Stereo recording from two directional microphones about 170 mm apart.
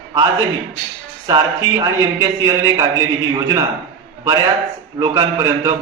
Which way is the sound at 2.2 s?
20° right (ahead or behind).